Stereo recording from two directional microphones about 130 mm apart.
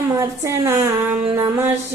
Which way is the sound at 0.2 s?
20° right (ahead or behind).